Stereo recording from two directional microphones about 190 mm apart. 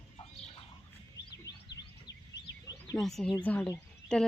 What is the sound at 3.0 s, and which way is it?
Speech, centre (ahead or behind).